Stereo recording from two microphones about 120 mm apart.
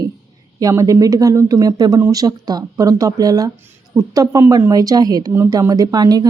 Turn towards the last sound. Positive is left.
turn(degrees=-35)  # may be behind; listen again after turning